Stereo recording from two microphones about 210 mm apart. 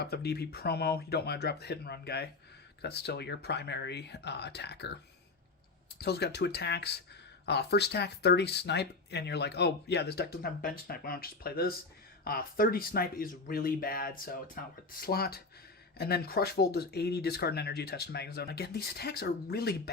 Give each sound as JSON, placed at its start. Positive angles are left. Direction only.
{"t": 0.0, "sound": "speech", "side_deg": 50}
{"t": 6.0, "sound": "speech", "side_deg": 50}